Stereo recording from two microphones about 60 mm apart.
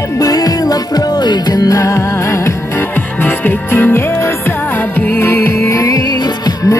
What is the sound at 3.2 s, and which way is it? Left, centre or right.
Music, left.